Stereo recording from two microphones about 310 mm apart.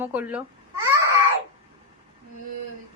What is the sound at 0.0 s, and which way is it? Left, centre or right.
Speech, centre.